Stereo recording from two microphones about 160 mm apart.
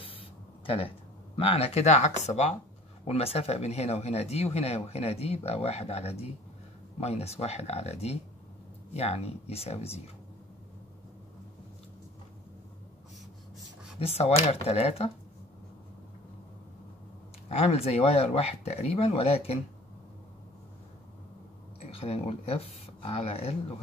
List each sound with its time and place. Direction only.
0.0 s a sound: 35° left (ahead or behind)
3.1 s speech: 40° left (ahead or behind)
13.9 s speech: 40° left (ahead or behind)
17.5 s speech: 40° left (ahead or behind)
21.7 s speech: 40° left (ahead or behind)